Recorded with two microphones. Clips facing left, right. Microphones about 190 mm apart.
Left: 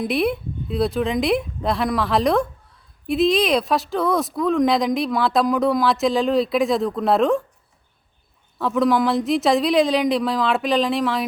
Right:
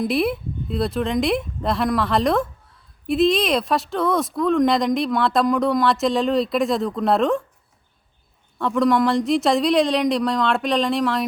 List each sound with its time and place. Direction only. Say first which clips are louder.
0.0 s speech: even; centre (ahead or behind)
8.5 s speech: even; centre (ahead or behind)